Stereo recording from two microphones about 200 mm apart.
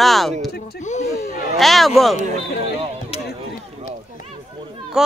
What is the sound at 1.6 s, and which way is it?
Speech, centre (ahead or behind).